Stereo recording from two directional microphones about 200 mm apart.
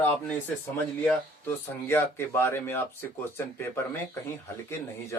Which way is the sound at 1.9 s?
10° left (ahead or behind).